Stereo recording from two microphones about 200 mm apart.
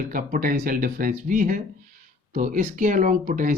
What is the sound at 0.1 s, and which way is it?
Speech, 40° right (ahead or behind).